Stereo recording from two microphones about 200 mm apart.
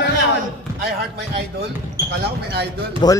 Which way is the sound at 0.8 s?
50° right (ahead or behind).